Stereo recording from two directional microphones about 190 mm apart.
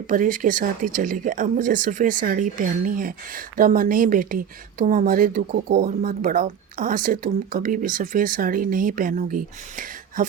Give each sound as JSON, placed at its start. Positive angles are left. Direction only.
{"t": 0.1, "sound": "speech", "side_deg": -45}